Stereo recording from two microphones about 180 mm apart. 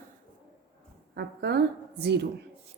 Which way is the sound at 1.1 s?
65° right (ahead or behind).